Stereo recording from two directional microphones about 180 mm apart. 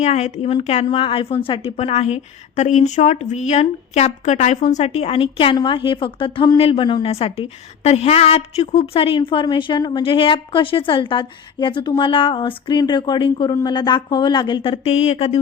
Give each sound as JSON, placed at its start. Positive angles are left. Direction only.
{"t": 0.0, "sound": "a woman's voice", "side_deg": 40}